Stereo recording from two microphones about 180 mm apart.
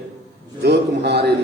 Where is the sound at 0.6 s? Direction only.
70° right (ahead or behind).